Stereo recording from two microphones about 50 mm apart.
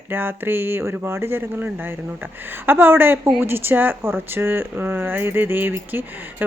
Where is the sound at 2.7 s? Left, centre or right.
Right.